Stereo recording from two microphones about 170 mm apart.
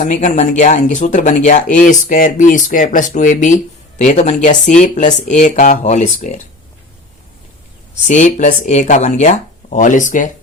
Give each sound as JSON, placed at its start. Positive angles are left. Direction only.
{"t": 0.0, "sound": "speech", "side_deg": 45}
{"t": 8.0, "sound": "speech", "side_deg": 45}